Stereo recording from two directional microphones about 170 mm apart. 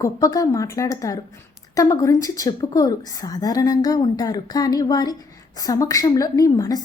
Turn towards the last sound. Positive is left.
turn(degrees=20)  # may be behind; listen again after turning